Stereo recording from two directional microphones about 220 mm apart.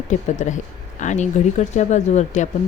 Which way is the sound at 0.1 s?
35° left (ahead or behind).